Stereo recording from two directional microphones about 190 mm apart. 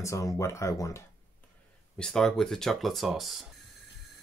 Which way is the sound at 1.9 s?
5° left (ahead or behind).